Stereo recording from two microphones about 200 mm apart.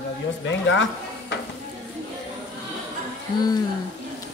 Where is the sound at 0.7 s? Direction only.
70° left (ahead or behind).